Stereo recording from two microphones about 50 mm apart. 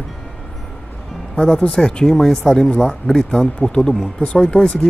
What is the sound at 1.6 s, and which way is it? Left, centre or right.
Speech, left.